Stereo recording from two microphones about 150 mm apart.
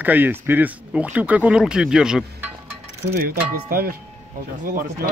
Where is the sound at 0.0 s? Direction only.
10° right (ahead or behind).